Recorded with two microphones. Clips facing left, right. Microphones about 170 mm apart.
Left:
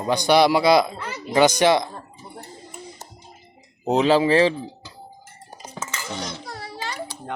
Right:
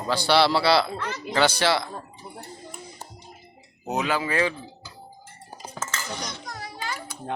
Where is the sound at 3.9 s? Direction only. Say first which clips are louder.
Left 9 dB; 30° left (ahead or behind).